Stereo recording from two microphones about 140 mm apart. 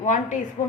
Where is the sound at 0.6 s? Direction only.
60° left (ahead or behind).